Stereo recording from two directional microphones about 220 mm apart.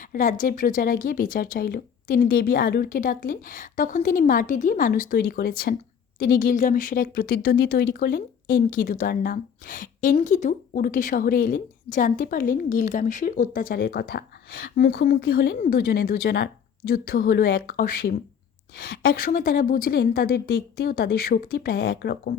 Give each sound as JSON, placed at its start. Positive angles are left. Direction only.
{"t": 0.0, "sound": "a woman's voice", "side_deg": 40}